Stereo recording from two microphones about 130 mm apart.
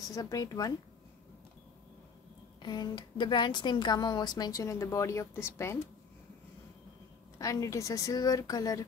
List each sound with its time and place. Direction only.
0.1 s a woman's voice: 25° left (ahead or behind)
2.6 s a woman's voice: 30° left (ahead or behind)
7.3 s a woman's voice: 25° left (ahead or behind)